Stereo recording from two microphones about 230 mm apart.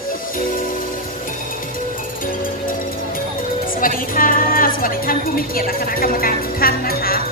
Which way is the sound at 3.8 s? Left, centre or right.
Left.